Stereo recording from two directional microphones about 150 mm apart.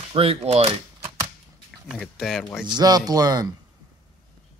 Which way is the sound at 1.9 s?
Centre (ahead or behind).